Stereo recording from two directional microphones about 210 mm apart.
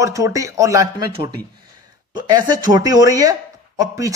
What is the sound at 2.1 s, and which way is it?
A man's voice, 20° right (ahead or behind).